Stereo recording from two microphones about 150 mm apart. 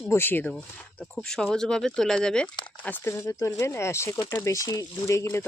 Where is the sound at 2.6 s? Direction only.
30° left (ahead or behind).